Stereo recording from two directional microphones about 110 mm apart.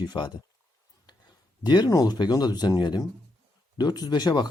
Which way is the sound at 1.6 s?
40° left (ahead or behind).